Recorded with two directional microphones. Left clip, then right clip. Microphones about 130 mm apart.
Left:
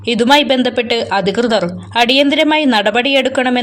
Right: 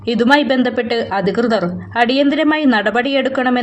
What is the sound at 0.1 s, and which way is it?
A woman's voice, 35° left (ahead or behind).